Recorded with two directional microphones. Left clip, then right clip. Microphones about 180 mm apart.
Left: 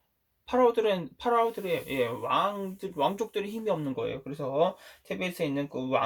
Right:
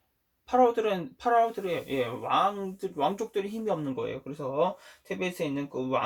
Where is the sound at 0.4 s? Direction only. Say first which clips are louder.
Even; 15° left (ahead or behind).